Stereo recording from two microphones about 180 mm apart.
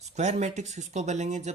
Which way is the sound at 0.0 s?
40° right (ahead or behind).